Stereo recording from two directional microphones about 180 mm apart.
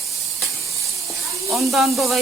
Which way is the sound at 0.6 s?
15° right (ahead or behind).